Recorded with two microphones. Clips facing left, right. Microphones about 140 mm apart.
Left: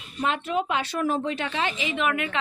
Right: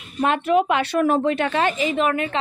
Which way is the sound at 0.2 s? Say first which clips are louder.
Right 7 dB; 60° right (ahead or behind).